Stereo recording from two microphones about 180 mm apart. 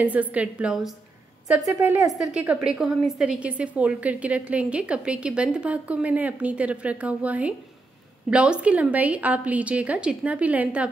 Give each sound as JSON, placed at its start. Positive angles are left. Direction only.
{"t": 0.0, "sound": "a woman's voice", "side_deg": -10}